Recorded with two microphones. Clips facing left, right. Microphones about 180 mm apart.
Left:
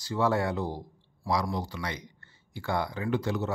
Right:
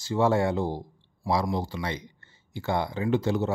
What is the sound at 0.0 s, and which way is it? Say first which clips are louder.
Speech: right 4 dB; 25° right (ahead or behind).